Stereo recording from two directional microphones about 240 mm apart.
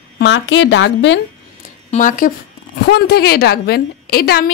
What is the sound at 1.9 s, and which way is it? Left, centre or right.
A woman's voice, left.